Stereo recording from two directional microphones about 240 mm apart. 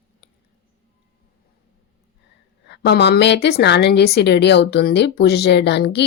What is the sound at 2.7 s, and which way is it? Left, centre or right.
A woman's voice, left.